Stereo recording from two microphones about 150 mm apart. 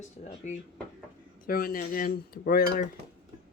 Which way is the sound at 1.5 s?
80° left.